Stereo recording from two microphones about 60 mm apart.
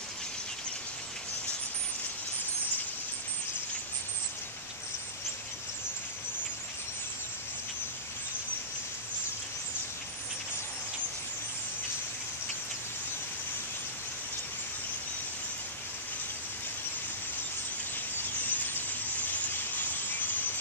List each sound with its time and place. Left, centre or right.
18.4 s vehicle: left